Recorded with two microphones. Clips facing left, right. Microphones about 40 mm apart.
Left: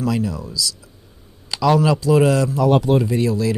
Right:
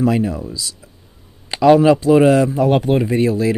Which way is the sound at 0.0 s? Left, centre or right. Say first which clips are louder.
Right 5 dB; right.